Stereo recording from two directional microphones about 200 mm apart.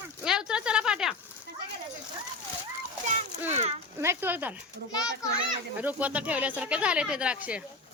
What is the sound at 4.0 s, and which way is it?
Speech, 10° right (ahead or behind).